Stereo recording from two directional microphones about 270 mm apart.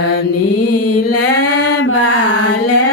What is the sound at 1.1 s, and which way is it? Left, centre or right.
Mantra, left.